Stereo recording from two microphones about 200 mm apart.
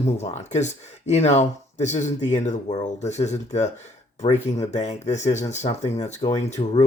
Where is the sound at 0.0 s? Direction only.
35° left (ahead or behind).